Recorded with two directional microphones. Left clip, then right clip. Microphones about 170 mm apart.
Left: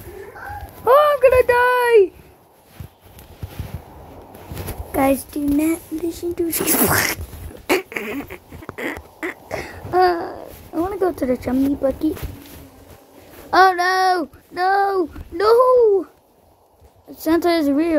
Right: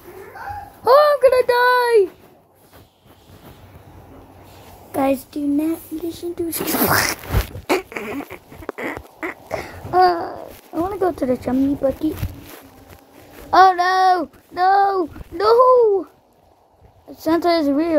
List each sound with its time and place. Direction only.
0.8 s a sound: centre (ahead or behind)
4.9 s speech: 10° left (ahead or behind)
7.6 s dog: 20° left (ahead or behind)
13.5 s speech: 10° left (ahead or behind)
17.1 s speech: 15° left (ahead or behind)